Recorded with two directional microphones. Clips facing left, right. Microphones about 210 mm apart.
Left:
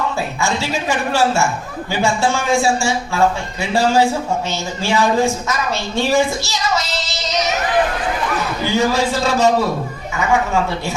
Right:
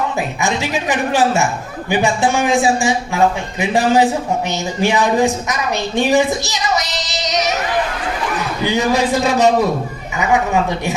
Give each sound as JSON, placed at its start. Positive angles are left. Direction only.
{"t": 0.2, "sound": "a man's voice", "side_deg": -20}
{"t": 8.6, "sound": "a man's voice", "side_deg": -15}